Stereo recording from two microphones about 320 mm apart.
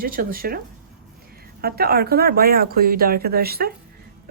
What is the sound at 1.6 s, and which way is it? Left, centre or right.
A woman's voice, right.